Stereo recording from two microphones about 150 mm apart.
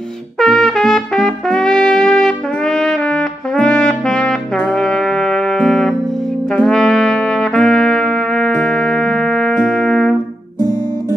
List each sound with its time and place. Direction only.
0.4 s trumpet: centre (ahead or behind)
10.6 s guitar: 15° right (ahead or behind)